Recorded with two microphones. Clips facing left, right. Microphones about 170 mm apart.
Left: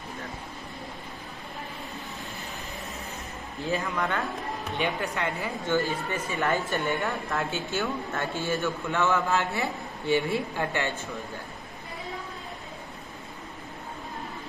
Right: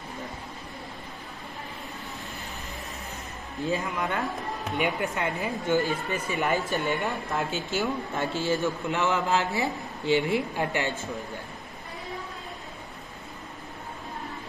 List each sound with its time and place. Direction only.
3.8 s a woman's voice: 20° right (ahead or behind)
8.3 s a man's voice: 20° left (ahead or behind)
8.8 s a woman's voice: 20° right (ahead or behind)